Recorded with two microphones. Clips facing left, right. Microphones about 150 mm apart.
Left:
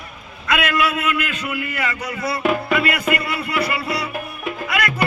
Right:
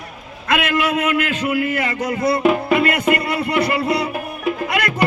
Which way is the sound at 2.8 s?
45° right (ahead or behind).